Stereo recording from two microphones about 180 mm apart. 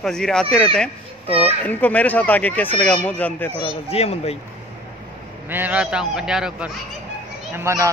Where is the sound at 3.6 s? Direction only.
35° left (ahead or behind).